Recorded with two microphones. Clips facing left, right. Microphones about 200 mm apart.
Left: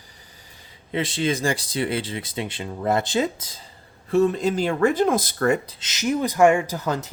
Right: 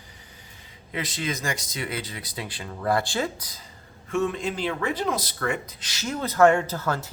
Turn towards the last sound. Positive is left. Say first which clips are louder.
# left 2 dB
turn(degrees=20)  # may be behind; listen again after turning